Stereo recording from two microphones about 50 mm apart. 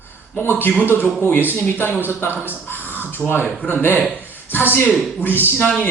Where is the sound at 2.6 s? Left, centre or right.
Left.